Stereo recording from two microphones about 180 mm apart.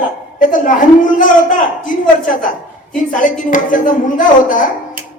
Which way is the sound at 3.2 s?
45° left (ahead or behind).